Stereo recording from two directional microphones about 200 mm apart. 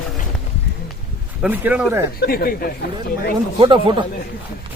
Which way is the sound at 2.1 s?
50° left (ahead or behind).